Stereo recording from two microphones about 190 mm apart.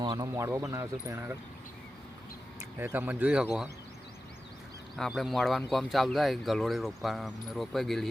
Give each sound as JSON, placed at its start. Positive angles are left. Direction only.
{"t": 0.0, "sound": "speech", "side_deg": -20}
{"t": 2.7, "sound": "speech", "side_deg": -10}
{"t": 4.9, "sound": "speech", "side_deg": 0}